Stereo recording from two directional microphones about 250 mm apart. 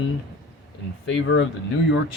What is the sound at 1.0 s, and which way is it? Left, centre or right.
Speech, left.